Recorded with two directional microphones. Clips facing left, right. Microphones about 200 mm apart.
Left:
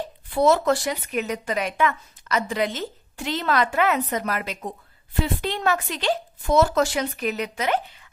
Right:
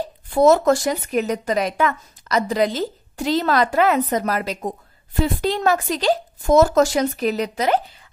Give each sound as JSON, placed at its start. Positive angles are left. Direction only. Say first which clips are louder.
{"t": 0.3, "sound": "speech", "louder": "right 5 dB", "side_deg": -45}